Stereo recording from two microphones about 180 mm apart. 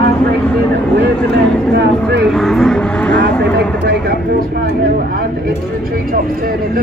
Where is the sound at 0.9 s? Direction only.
70° right (ahead or behind).